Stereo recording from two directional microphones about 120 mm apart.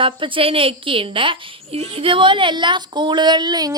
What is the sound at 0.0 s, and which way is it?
A woman's voice, 45° right (ahead or behind).